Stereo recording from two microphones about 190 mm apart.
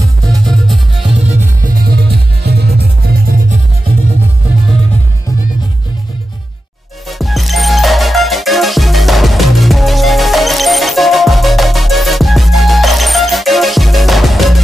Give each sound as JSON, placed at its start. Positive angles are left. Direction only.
{"t": 0.3, "sound": "music", "side_deg": 0}
{"t": 1.1, "sound": "music", "side_deg": -45}
{"t": 7.1, "sound": "music", "side_deg": 0}